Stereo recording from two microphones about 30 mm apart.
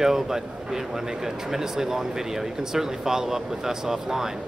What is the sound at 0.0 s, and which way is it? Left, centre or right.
A man's voice, centre.